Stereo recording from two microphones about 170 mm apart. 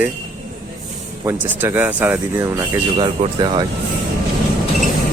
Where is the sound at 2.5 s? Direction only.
30° right (ahead or behind).